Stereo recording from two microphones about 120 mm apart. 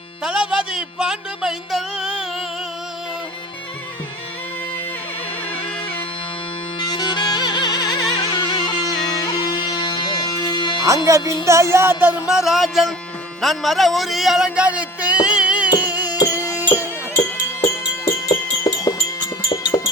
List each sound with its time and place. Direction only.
0.2 s music: 5° right (ahead or behind)
6.7 s music: 35° left (ahead or behind)
10.8 s speech: 25° right (ahead or behind)
11.4 s music: 25° right (ahead or behind); by 12.9 s centre (ahead or behind)
13.4 s speech: centre (ahead or behind)
15.8 s music: 15° right (ahead or behind)
16.1 s music: 25° left (ahead or behind)
19.7 s music: 35° left (ahead or behind)